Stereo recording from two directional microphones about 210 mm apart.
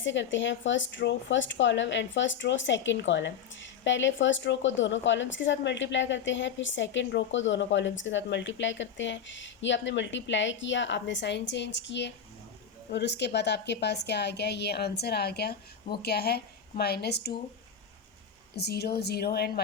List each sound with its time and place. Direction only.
0.0 s a woman's voice: 60° left (ahead or behind)
18.5 s a woman's voice: 50° left (ahead or behind)